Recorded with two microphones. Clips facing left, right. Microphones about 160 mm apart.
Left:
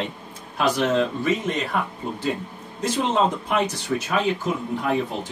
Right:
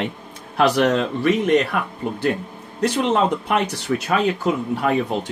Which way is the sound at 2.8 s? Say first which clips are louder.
Right 3 dB; 65° right (ahead or behind).